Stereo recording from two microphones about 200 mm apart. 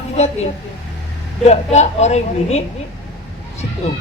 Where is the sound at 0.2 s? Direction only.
35° left (ahead or behind).